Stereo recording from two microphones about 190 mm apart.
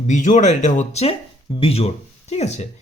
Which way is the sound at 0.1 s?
40° left (ahead or behind).